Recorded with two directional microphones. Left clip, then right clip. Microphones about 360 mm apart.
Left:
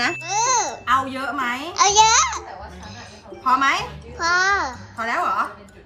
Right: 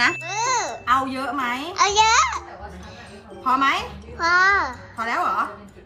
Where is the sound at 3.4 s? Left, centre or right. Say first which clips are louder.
Left 1 dB; centre.